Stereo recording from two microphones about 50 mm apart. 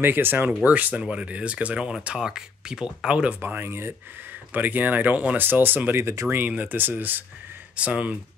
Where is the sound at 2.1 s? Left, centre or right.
Centre.